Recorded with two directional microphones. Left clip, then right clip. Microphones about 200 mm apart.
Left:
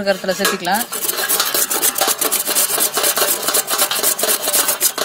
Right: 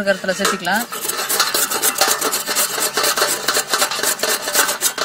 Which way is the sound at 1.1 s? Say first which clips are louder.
Right 1 dB; 15° left (ahead or behind).